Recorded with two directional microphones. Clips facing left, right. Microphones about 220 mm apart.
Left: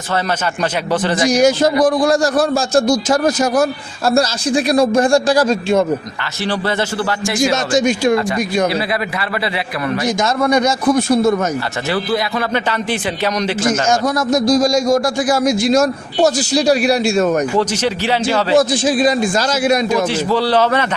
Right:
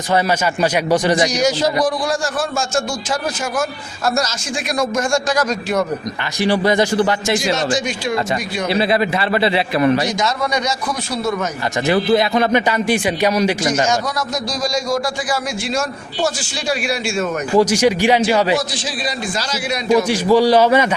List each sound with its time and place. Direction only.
0.9 s a man's voice: 15° right (ahead or behind)
1.3 s a man's voice: 50° left (ahead or behind); by 5.8 s 30° left (ahead or behind)
6.4 s a man's voice: 15° right (ahead or behind)
7.5 s a man's voice: 45° left (ahead or behind)
8.9 s a man's voice: 25° right (ahead or behind)
10.2 s a man's voice: 50° left (ahead or behind)
11.9 s a man's voice: 20° right (ahead or behind)
14.3 s a man's voice: 50° left (ahead or behind)
17.6 s a man's voice: 10° right (ahead or behind)
18.5 s a man's voice: 50° left (ahead or behind)
20.1 s a man's voice: 10° right (ahead or behind)